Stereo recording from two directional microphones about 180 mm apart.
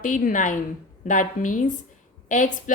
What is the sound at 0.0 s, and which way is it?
A woman's voice, 45° left (ahead or behind).